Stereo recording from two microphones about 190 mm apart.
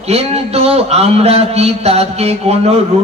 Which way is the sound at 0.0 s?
35° right (ahead or behind).